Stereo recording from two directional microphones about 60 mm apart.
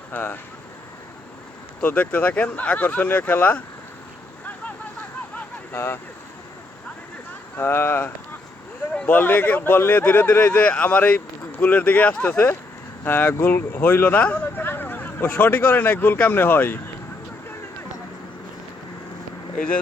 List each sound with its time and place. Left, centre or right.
0.1 s speech: left
1.8 s speech: left
5.7 s speech: left
7.5 s speech: left
10.0 s speech: left
19.5 s speech: left